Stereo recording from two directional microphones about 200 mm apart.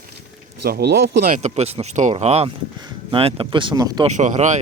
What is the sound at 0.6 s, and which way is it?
Speech, 55° right (ahead or behind).